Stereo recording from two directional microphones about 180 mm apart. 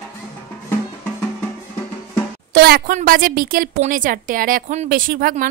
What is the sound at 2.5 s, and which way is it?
A woman's voice, 55° right (ahead or behind).